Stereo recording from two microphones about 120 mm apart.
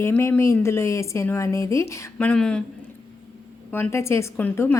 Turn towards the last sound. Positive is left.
turn(degrees=20)  # may be behind; listen again after turning